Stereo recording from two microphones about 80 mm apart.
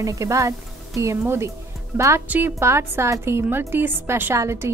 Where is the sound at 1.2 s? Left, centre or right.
Right.